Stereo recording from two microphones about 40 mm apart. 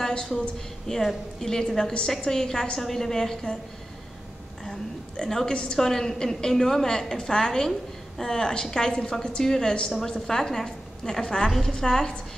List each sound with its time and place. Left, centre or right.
0.0 s a sound: left
0.9 s a woman's voice: centre
5.1 s a woman's voice: centre